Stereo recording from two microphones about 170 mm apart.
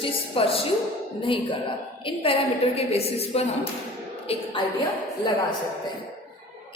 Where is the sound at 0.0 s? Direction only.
35° left (ahead or behind).